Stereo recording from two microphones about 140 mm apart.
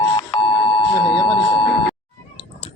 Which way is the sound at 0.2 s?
35° left (ahead or behind).